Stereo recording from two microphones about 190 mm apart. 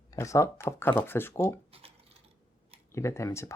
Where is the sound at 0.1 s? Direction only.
15° left (ahead or behind).